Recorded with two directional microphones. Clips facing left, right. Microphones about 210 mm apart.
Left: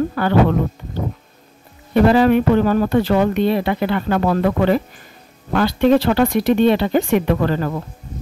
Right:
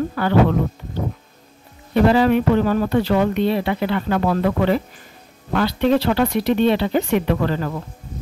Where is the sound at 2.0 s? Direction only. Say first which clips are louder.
Left 2 dB; 50° left (ahead or behind).